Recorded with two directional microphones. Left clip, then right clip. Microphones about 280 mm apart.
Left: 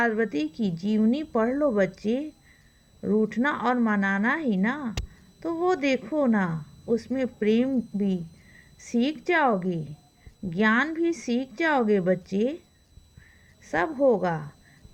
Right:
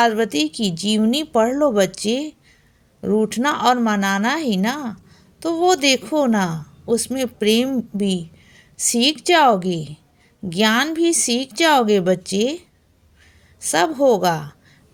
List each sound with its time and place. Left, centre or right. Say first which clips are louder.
0.0 s a woman's voice: right 8 dB; centre